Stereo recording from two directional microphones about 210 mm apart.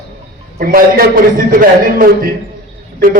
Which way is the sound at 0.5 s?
45° right (ahead or behind).